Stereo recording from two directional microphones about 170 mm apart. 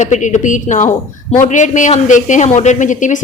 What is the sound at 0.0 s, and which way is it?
A woman's voice, 45° left (ahead or behind).